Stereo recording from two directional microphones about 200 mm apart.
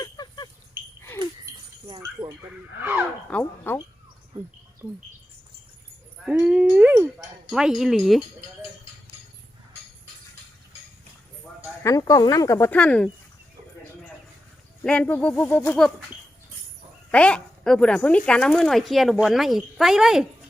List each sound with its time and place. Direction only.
0.0 s a sound: 20° left (ahead or behind)
3.2 s speech: 10° left (ahead or behind)
4.8 s speech: centre (ahead or behind)
6.2 s a sound: 5° right (ahead or behind)
7.2 s speech: centre (ahead or behind)
11.8 s speech: 15° left (ahead or behind)
14.8 s speech: 5° left (ahead or behind)
17.1 s speech: 5° left (ahead or behind)